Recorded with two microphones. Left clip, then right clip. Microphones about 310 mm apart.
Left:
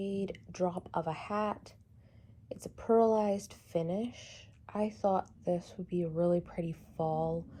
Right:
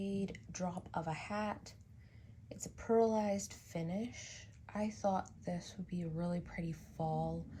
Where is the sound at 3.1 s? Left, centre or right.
Centre.